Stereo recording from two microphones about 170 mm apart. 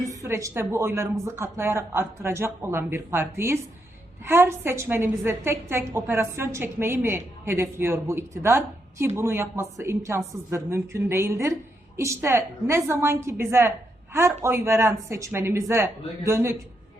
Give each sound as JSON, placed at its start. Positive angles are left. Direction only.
{"t": 0.0, "sound": "a woman's voice", "side_deg": -20}